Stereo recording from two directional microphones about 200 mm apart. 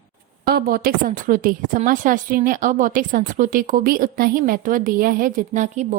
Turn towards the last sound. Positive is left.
turn(degrees=-35)  # may be behind; listen again after turning